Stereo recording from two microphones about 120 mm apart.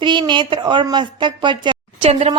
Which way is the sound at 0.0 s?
40° right (ahead or behind).